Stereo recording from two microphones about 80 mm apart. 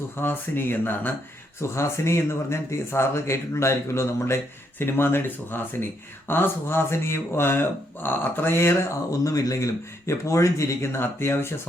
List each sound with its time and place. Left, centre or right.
0.2 s speech: left
1.6 s speech: left